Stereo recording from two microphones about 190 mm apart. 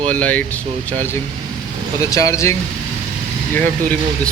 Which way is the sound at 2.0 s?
15° left (ahead or behind).